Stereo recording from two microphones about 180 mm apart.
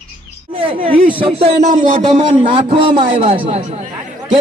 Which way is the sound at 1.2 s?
30° right (ahead or behind).